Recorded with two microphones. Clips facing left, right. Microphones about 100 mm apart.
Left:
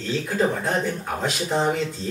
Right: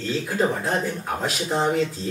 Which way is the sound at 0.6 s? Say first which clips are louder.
Even; centre (ahead or behind).